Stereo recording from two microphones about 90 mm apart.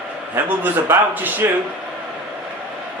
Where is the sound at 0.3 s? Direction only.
25° right (ahead or behind).